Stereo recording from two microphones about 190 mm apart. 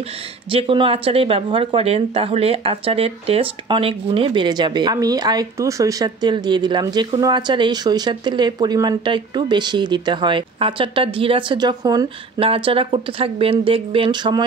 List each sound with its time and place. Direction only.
0.5 s speech: 30° right (ahead or behind)